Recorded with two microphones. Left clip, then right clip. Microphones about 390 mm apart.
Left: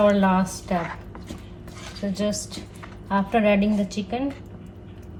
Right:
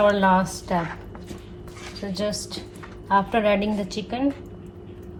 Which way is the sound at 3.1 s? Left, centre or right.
Centre.